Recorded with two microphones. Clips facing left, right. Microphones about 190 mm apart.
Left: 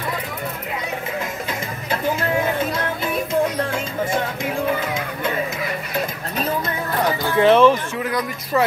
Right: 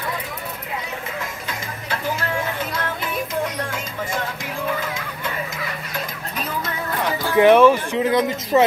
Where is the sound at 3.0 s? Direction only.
30° left (ahead or behind).